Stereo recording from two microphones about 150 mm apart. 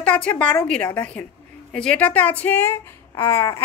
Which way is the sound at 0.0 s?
10° left (ahead or behind).